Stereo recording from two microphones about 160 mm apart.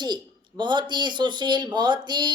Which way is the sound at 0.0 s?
25° right (ahead or behind).